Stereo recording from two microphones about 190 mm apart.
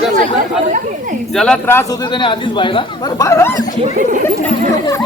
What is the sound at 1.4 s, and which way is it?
Speech, 10° left (ahead or behind).